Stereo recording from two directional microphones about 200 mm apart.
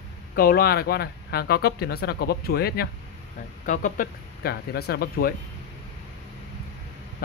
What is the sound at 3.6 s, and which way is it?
Speech, 40° left (ahead or behind).